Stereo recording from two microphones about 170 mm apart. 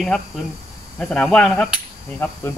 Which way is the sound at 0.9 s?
5° left (ahead or behind).